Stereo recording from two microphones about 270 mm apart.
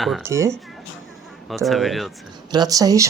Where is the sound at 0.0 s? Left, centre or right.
Centre.